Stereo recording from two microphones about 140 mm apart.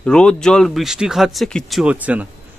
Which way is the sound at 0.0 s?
5° left (ahead or behind).